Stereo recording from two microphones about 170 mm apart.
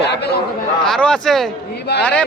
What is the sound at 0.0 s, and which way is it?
Chatter, 80° left.